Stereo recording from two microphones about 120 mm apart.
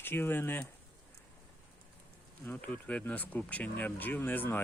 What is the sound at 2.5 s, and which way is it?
Speech, 10° left (ahead or behind).